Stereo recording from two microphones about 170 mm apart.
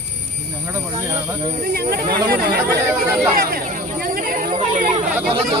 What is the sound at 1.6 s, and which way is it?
Speech, 65° right (ahead or behind).